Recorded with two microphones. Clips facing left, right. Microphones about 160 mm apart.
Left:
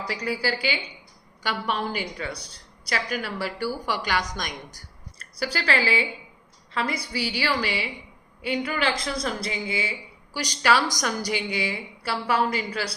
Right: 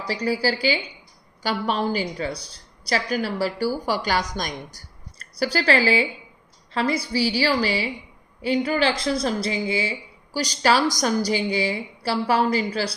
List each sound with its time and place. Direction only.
0.1 s a woman's voice: 30° right (ahead or behind)